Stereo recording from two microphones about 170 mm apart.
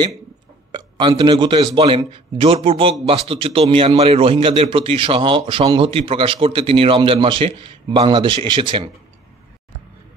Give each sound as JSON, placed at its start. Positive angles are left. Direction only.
{"t": 0.7, "sound": "speech", "side_deg": -30}